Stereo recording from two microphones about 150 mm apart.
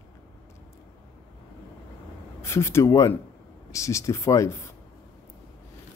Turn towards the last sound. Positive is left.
turn(degrees=20)  # may be behind; listen again after turning